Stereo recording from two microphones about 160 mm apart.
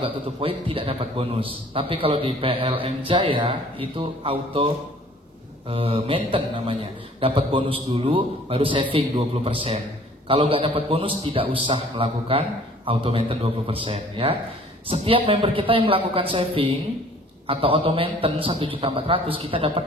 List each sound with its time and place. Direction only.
0.0 s a man's voice: 35° right (ahead or behind)
5.7 s a man's voice: 35° right (ahead or behind)